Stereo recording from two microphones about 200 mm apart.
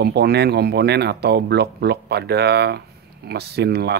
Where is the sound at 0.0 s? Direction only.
55° right (ahead or behind).